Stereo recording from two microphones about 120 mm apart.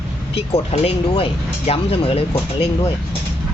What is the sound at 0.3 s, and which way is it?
Speech, 60° left (ahead or behind).